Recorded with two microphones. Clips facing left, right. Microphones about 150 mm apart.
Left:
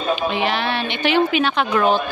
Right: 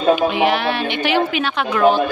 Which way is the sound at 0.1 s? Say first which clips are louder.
Right 5 dB; 10° right (ahead or behind).